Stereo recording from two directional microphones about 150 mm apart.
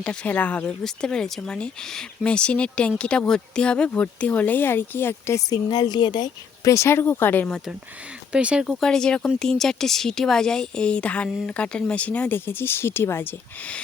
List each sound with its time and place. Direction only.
0.0 s speech: 5° left (ahead or behind)
5.6 s speech: 30° left (ahead or behind); by 7.6 s 10° left (ahead or behind)
8.3 s speech: 5° right (ahead or behind); by 13.8 s 10° left (ahead or behind)